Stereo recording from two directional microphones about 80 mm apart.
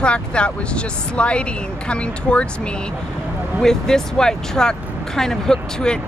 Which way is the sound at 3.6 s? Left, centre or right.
Centre.